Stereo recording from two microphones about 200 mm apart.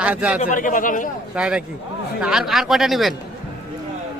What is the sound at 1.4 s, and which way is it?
Speech, 5° right (ahead or behind).